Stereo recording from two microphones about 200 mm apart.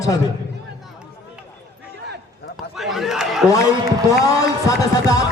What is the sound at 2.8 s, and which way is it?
Chatter, centre (ahead or behind).